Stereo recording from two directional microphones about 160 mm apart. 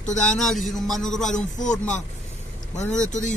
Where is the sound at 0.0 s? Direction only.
50° left (ahead or behind).